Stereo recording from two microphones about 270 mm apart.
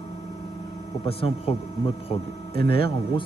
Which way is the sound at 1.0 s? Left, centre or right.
Left.